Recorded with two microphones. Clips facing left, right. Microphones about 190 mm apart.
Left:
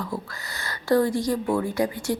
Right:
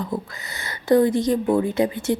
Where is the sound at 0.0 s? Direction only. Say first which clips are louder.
Right 4 dB; 20° right (ahead or behind).